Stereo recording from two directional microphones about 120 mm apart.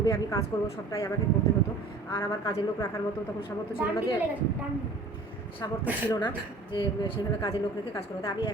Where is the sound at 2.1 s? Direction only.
25° left (ahead or behind).